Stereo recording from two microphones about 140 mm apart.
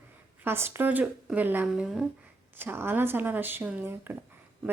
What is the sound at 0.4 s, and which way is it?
Speech, 15° right (ahead or behind).